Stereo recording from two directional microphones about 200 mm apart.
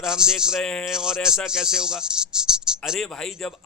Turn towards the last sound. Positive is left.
turn(degrees=0)  # may be behind; listen again after turning